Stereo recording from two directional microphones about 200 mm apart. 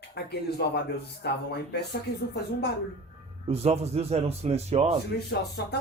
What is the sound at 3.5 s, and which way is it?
A man's voice, 30° right (ahead or behind).